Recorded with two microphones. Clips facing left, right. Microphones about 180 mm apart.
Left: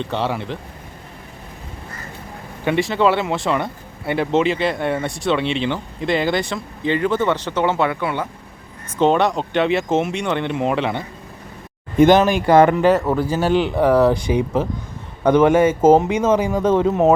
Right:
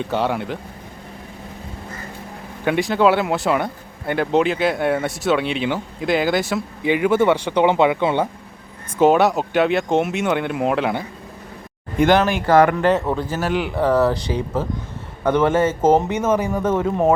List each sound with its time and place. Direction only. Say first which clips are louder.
0.0 s speech: right 1 dB; centre (ahead or behind)
2.6 s speech: right 1 dB; centre (ahead or behind); by 8.3 s 25° right (ahead or behind)
9.0 s speech: right 2 dB; 5° right (ahead or behind)
11.9 s speech: left 4 dB; 20° left (ahead or behind); by 13.2 s centre (ahead or behind)
13.4 s speech: left 5 dB; 25° left (ahead or behind)
13.7 s speech: left 1 dB; 15° left (ahead or behind)